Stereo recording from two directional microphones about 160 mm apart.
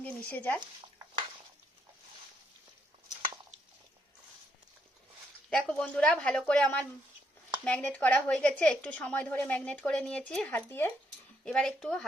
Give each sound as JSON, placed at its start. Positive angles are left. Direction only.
{"t": 0.0, "sound": "speech", "side_deg": 10}
{"t": 5.5, "sound": "a woman's voice", "side_deg": 5}
{"t": 11.4, "sound": "speech", "side_deg": 5}